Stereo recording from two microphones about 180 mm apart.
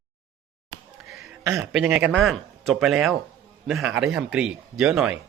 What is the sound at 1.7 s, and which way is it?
Speech, 5° right (ahead or behind).